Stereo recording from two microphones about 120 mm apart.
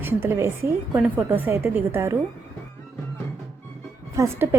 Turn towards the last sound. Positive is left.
turn(degrees=-25)  # may be behind; listen again after turning